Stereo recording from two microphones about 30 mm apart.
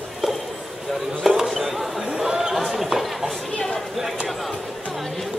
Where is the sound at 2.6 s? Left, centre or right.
Centre.